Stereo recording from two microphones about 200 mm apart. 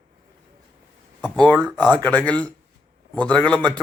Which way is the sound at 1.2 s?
5° left (ahead or behind).